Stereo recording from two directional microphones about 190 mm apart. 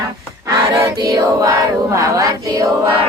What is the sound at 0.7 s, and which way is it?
Choir, 20° right (ahead or behind).